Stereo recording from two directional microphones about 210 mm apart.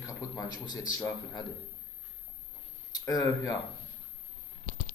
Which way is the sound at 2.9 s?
15° left (ahead or behind).